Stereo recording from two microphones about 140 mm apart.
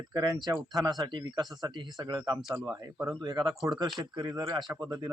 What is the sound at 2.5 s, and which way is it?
Speech, 20° right (ahead or behind).